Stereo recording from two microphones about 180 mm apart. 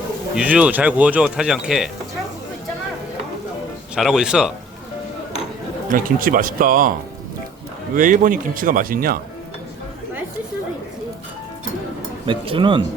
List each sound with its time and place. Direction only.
0.3 s speech: 10° right (ahead or behind)
3.9 s speech: 5° right (ahead or behind)
5.9 s a man's voice: 50° right (ahead or behind)
7.9 s a man's voice: 45° right (ahead or behind)
12.2 s speech: 30° right (ahead or behind)